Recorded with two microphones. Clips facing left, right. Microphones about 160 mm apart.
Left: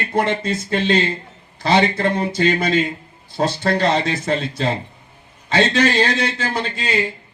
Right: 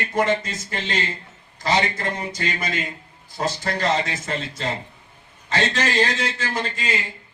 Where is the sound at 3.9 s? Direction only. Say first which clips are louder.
Left 5 dB; 30° left (ahead or behind).